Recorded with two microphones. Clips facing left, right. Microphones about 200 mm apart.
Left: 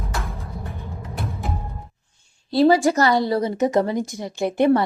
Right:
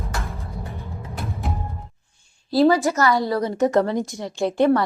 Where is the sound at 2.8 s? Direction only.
30° left (ahead or behind).